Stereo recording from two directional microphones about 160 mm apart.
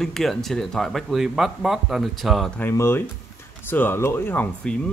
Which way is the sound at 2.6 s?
15° left (ahead or behind).